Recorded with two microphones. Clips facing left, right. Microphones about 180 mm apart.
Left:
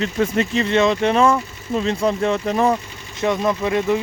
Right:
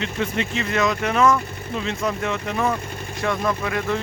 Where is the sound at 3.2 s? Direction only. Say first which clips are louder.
Left 4 dB; 20° left (ahead or behind).